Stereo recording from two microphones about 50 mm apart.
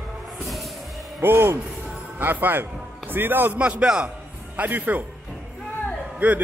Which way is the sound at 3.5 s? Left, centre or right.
Right.